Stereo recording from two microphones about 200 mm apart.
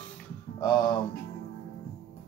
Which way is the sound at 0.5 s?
20° left (ahead or behind).